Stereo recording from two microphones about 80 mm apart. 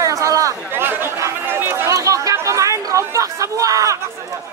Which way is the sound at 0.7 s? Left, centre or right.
Right.